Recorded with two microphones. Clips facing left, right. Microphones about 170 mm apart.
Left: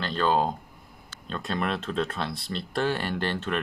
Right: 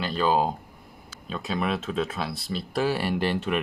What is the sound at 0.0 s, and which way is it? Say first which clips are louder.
Speech: right 1 dB; 5° right (ahead or behind).